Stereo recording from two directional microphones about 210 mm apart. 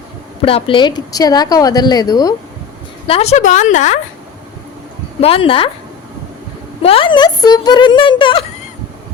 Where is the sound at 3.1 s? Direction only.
30° left (ahead or behind).